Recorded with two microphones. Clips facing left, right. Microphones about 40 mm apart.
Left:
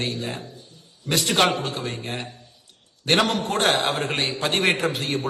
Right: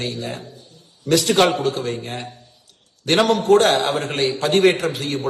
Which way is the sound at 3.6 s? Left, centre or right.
Right.